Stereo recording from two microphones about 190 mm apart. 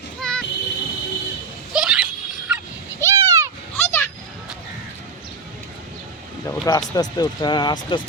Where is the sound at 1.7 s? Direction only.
5° right (ahead or behind).